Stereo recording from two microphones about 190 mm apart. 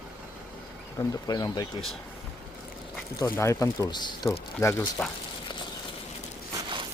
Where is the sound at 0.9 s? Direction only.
20° left (ahead or behind).